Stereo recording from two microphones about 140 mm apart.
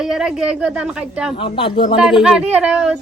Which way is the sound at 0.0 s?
5° right (ahead or behind).